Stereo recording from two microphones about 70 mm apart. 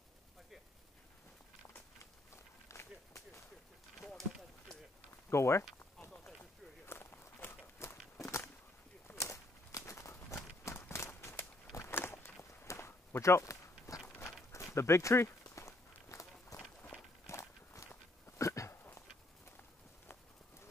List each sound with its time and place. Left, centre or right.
2.3 s run: left
4.0 s a sound: centre
5.3 s speech: left
6.9 s walk: left
9.0 s walk: left
18.4 s a sound: left